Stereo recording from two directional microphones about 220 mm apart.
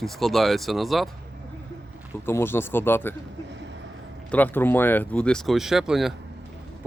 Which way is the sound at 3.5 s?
55° right (ahead or behind).